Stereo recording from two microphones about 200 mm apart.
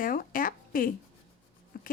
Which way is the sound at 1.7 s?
45° left (ahead or behind).